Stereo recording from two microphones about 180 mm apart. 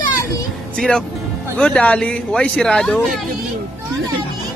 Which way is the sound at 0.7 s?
5° left (ahead or behind).